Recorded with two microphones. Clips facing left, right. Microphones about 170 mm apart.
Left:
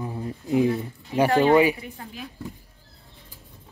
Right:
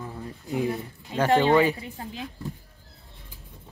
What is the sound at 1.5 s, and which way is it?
Speech, 15° left (ahead or behind).